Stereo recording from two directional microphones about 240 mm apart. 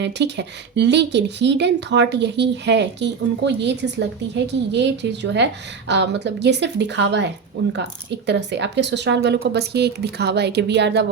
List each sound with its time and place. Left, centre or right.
0.0 s speech: right